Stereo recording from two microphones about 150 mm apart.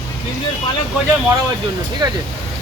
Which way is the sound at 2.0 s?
30° right (ahead or behind).